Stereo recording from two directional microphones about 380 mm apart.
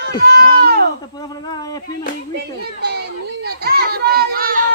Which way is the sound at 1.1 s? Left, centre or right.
Centre.